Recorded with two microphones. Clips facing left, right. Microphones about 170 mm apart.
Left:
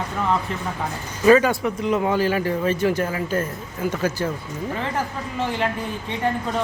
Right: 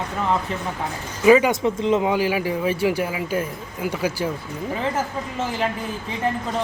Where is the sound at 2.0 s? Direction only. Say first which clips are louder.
Even; 10° right (ahead or behind).